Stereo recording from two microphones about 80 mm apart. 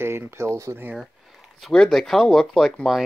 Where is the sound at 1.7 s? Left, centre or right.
Centre.